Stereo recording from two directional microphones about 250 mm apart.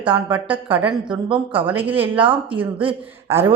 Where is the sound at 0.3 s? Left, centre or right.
Centre.